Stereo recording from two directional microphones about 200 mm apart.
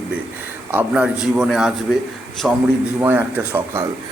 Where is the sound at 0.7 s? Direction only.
5° right (ahead or behind).